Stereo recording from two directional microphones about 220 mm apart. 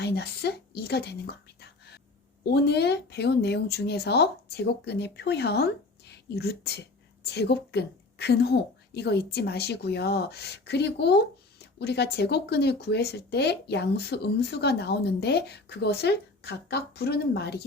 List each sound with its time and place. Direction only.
0.0 s speech: 50° left (ahead or behind)
2.4 s speech: 50° left (ahead or behind)